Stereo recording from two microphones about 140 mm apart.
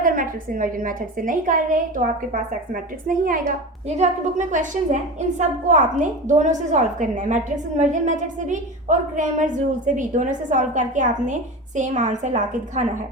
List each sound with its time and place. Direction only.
0.0 s a woman's voice: 80° right
3.8 s a woman's voice: 50° right (ahead or behind)